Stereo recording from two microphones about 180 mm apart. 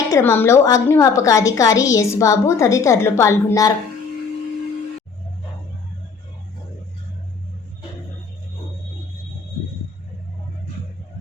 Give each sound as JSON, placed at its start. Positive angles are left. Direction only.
{"t": 0.1, "sound": "a woman's voice", "side_deg": 15}